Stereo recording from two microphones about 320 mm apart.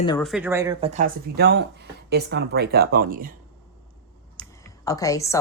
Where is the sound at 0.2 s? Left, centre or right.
Centre; by 3.3 s right.